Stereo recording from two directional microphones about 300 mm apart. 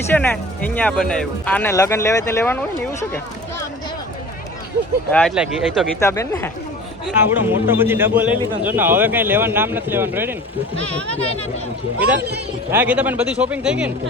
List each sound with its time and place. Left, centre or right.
0.1 s speech: centre
5.1 s speech: centre
7.0 s a man's voice: centre
11.1 s speech: centre
11.9 s speech: centre